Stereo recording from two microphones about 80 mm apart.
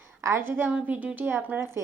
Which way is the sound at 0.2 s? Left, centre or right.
Right.